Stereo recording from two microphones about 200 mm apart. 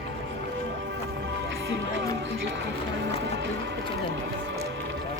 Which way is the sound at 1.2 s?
65° right (ahead or behind).